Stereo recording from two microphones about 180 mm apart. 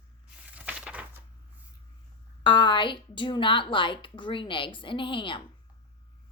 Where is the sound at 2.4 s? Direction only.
25° left (ahead or behind).